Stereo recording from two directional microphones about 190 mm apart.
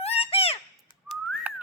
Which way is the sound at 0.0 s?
30° left (ahead or behind).